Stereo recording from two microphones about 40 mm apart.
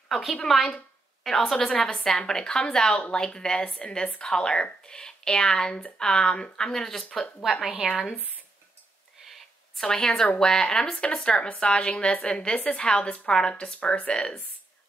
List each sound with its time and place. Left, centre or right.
0.1 s a woman's voice: centre
1.9 s speech: centre
7.5 s a woman's voice: centre
7.8 s speech: right
9.8 s speech: centre